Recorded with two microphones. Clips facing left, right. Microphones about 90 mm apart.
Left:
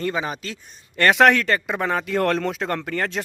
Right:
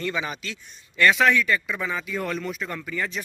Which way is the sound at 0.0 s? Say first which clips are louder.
Left 3 dB; 40° left (ahead or behind).